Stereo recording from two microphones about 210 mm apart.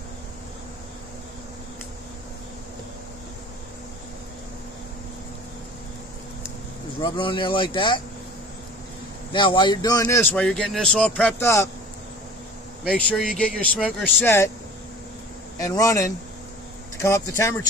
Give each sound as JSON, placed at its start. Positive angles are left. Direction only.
{"t": 7.0, "sound": "speech", "side_deg": 25}
{"t": 9.3, "sound": "speech", "side_deg": 20}
{"t": 12.8, "sound": "speech", "side_deg": 0}
{"t": 15.5, "sound": "speech", "side_deg": 15}